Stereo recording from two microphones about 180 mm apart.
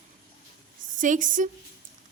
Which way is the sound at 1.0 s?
45° right (ahead or behind).